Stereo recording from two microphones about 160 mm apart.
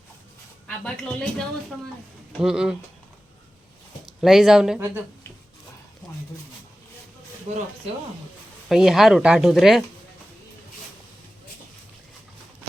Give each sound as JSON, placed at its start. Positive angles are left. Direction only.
{"t": 0.9, "sound": "speech", "side_deg": 5}
{"t": 4.0, "sound": "speech", "side_deg": 0}
{"t": 7.5, "sound": "speech", "side_deg": -40}
{"t": 8.7, "sound": "speech", "side_deg": 0}